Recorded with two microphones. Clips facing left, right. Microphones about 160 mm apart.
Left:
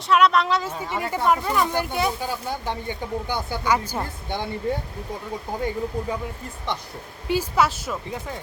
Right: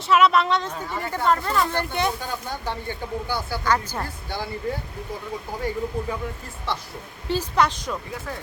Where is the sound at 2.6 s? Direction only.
15° left (ahead or behind).